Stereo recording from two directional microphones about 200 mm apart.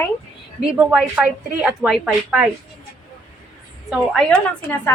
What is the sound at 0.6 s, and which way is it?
Speech, 5° right (ahead or behind).